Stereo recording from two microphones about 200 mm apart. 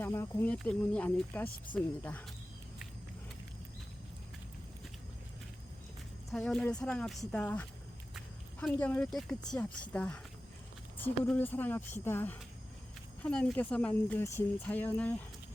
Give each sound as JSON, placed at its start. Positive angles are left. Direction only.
{"t": 0.0, "sound": "speech", "side_deg": 10}
{"t": 6.3, "sound": "speech", "side_deg": 0}